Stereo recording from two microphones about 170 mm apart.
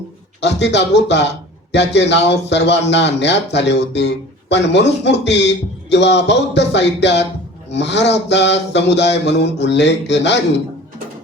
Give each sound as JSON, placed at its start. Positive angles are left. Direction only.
{"t": 0.4, "sound": "speech", "side_deg": 90}